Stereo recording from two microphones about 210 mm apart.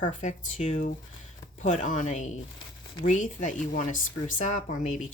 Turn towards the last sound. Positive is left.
turn(degrees=35)  # may be behind; listen again after turning